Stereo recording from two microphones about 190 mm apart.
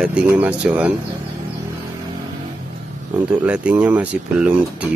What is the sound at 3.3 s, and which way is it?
Speech, 5° right (ahead or behind).